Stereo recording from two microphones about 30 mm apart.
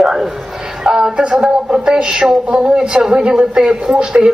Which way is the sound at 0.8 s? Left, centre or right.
Right.